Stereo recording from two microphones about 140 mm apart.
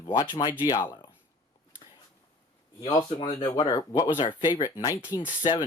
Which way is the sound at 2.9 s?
35° left (ahead or behind).